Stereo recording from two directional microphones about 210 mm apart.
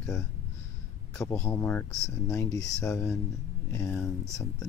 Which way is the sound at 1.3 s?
10° left (ahead or behind).